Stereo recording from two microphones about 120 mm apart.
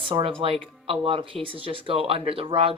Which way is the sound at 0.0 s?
45° right (ahead or behind).